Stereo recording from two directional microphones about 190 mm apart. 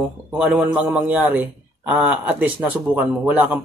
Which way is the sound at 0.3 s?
5° right (ahead or behind).